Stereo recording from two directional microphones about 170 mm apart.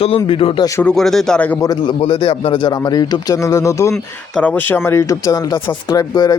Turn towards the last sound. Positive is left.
turn(degrees=20)  # may be behind; listen again after turning